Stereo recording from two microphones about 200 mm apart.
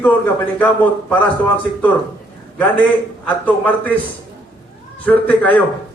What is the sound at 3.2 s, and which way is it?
Speech, 10° left (ahead or behind).